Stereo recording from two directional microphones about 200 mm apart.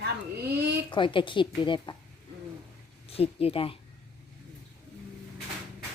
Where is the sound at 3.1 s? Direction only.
30° left (ahead or behind).